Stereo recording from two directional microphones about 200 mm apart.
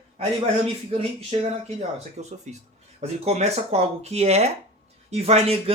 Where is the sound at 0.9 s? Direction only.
30° right (ahead or behind).